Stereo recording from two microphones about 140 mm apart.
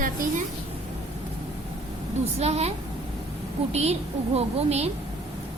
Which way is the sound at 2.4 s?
50° right (ahead or behind).